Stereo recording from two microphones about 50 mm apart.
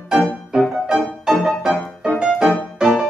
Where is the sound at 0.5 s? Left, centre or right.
Centre.